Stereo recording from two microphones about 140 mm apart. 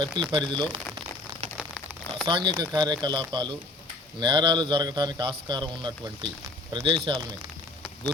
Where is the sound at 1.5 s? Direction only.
Centre (ahead or behind).